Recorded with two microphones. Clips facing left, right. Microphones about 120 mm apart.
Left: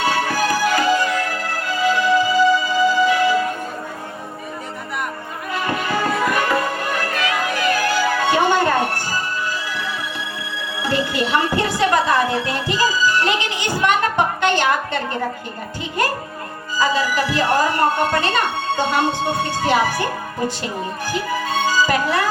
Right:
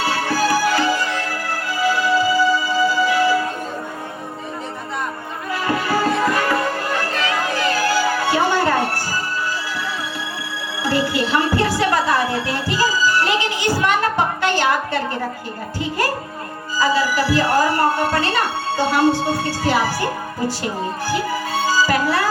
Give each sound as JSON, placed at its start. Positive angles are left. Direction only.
{"t": 0.0, "sound": "music", "side_deg": 20}
{"t": 1.8, "sound": "music", "side_deg": 20}
{"t": 5.6, "sound": "music", "side_deg": 20}
{"t": 7.1, "sound": "music", "side_deg": -30}
{"t": 7.9, "sound": "music", "side_deg": 20}
{"t": 10.8, "sound": "music", "side_deg": 20}
{"t": 16.8, "sound": "speech", "side_deg": 20}
{"t": 21.1, "sound": "music", "side_deg": 20}